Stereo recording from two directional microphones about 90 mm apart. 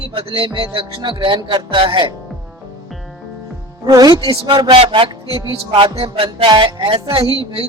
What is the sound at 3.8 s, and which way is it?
Speech, 45° right (ahead or behind).